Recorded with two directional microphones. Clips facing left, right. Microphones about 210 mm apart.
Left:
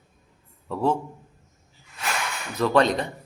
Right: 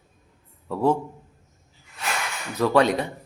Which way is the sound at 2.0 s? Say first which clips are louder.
Even; centre (ahead or behind).